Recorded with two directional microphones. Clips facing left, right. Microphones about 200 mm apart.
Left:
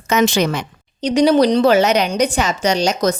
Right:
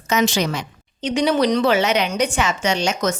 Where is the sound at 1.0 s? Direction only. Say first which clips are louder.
Left 5 dB; 35° left (ahead or behind).